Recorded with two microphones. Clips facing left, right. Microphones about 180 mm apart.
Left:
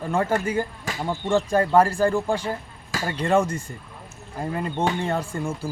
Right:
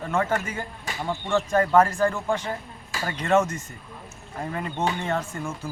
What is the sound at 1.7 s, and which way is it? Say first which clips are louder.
Speech: left 2 dB; 30° left (ahead or behind).